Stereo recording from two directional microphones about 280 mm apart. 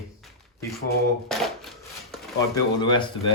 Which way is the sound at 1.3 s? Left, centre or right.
Centre.